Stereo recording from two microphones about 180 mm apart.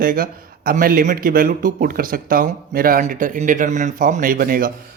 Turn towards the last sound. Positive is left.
turn(degrees=-50)  # may be behind; listen again after turning